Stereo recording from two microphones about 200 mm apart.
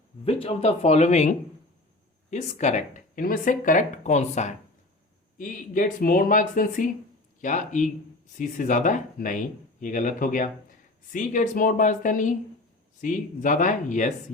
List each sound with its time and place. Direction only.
0.3 s speech: 30° left (ahead or behind)